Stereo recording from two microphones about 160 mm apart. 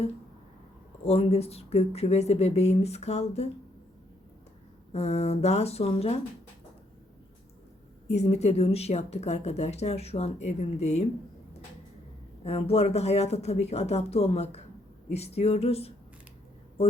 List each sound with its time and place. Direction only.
1.0 s speech: 40° left (ahead or behind)
4.9 s a woman's voice: 40° left (ahead or behind)
8.0 s a woman's voice: 45° left (ahead or behind)
12.4 s speech: 40° left (ahead or behind)